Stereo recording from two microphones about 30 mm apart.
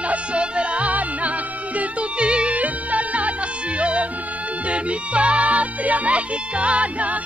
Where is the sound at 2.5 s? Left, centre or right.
Right.